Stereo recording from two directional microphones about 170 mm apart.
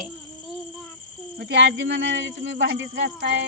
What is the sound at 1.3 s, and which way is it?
Speech, 90° right.